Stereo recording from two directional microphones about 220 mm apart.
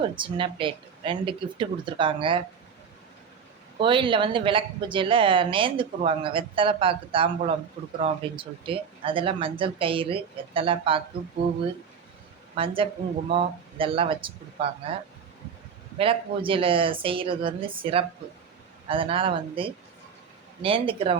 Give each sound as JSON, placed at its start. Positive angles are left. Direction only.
{"t": 0.2, "sound": "a woman's voice", "side_deg": -25}
{"t": 3.8, "sound": "a woman's voice", "side_deg": -25}
{"t": 12.5, "sound": "a woman's voice", "side_deg": -25}
{"t": 16.0, "sound": "a woman's voice", "side_deg": -25}